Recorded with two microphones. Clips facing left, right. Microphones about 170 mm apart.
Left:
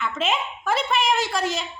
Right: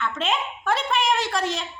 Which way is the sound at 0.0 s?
5° left (ahead or behind).